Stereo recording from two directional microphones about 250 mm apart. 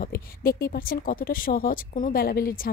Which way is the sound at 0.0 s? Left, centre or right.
Left.